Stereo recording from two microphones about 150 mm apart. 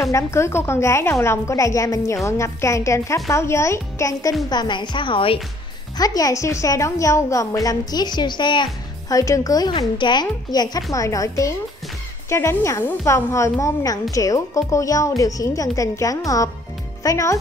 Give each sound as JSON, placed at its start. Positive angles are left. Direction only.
{"t": 0.0, "sound": "a woman's voice", "side_deg": 20}
{"t": 5.9, "sound": "a woman's voice", "side_deg": 25}